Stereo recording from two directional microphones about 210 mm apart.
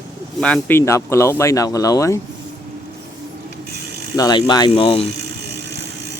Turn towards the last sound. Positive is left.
turn(degrees=25)  # may be behind; listen again after turning